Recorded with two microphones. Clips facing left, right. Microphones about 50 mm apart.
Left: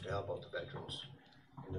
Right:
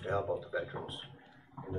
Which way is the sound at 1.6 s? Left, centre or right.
Right.